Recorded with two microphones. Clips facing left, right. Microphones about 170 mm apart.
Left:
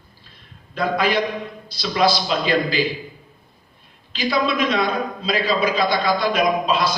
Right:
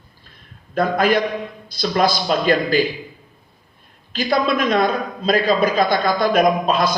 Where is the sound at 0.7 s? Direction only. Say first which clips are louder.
Right 3 dB; 50° right (ahead or behind).